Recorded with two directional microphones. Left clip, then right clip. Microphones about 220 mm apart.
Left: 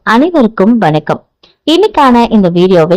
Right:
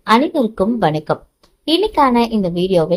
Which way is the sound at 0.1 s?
25° left (ahead or behind).